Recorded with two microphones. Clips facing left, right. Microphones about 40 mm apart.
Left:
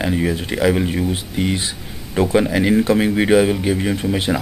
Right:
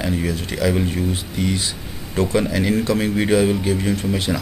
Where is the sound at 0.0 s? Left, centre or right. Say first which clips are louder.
Left 3 dB; left.